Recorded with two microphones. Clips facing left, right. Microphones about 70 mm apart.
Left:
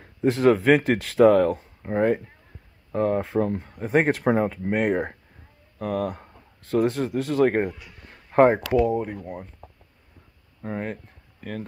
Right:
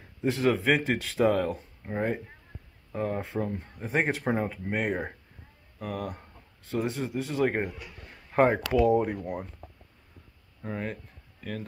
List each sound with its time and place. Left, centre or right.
0.0 s speech: left
8.9 s speech: centre
10.6 s speech: left